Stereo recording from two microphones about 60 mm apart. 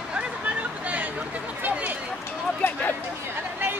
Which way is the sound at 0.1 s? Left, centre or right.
Centre.